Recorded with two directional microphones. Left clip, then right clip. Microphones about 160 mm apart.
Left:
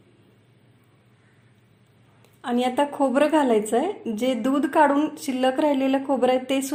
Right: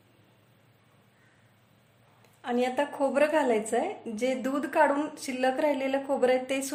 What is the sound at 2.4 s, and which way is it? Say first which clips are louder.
A woman's voice: left 5 dB; 25° left (ahead or behind).